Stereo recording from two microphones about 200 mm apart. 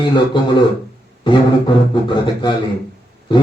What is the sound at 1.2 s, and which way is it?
Didgeridoo, 25° left (ahead or behind).